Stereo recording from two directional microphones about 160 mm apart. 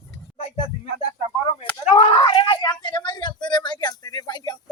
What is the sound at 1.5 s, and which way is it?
Speech, 40° left (ahead or behind).